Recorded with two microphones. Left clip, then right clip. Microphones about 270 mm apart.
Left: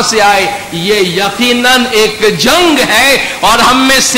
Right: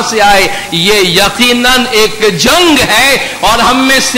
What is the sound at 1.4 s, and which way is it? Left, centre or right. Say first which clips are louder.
A man's voice: right 1 dB; centre.